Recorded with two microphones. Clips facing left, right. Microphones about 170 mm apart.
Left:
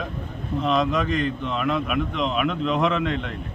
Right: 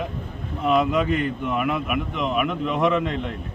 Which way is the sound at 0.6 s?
10° right (ahead or behind).